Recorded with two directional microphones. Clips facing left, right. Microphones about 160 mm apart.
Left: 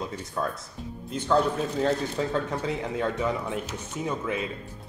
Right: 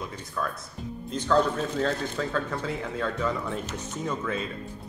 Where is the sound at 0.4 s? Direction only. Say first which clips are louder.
Left 2 dB; 25° left (ahead or behind).